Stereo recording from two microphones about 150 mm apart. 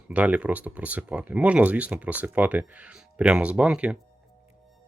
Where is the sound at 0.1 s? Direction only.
10° right (ahead or behind).